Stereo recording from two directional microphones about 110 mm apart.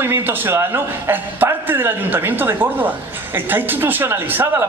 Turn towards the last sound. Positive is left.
turn(degrees=-20)  # may be behind; listen again after turning